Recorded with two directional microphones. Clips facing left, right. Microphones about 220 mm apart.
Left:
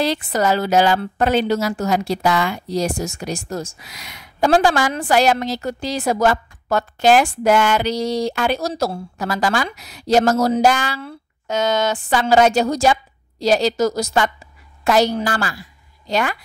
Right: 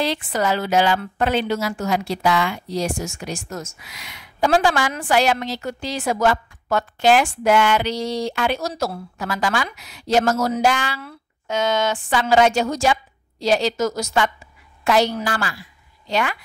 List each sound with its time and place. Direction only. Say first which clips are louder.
0.0 s a woman's voice: left 3 dB; 40° left (ahead or behind)